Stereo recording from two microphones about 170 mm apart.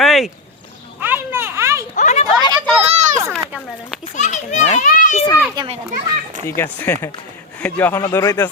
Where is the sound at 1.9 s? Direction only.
40° left (ahead or behind).